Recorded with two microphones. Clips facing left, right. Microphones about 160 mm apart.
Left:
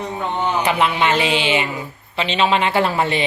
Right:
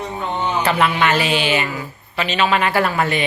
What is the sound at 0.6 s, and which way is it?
A woman's voice, 20° left (ahead or behind).